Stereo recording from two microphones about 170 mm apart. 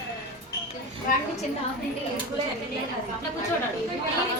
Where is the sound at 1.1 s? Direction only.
55° left (ahead or behind).